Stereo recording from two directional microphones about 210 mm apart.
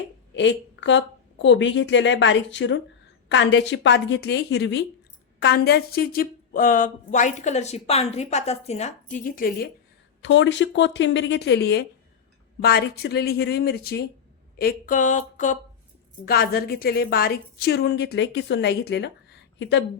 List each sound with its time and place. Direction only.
0.3 s a woman's voice: 60° left (ahead or behind); by 9.6 s 40° left (ahead or behind)
10.2 s a woman's voice: 60° left (ahead or behind)